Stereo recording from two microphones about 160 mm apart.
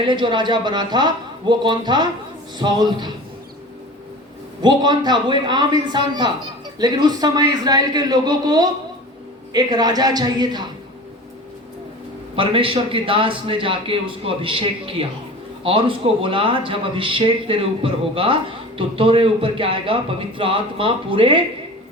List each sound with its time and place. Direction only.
0.1 s speech: 30° right (ahead or behind)
4.6 s speech: 25° right (ahead or behind)
12.4 s speech: 35° right (ahead or behind)